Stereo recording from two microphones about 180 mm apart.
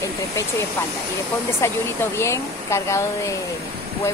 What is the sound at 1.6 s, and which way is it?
Speech, 15° left (ahead or behind).